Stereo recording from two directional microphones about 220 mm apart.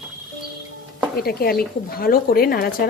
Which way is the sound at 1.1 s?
45° left (ahead or behind).